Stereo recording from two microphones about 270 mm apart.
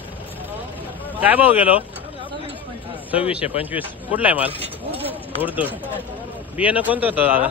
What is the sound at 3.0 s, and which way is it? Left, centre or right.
Speech, centre.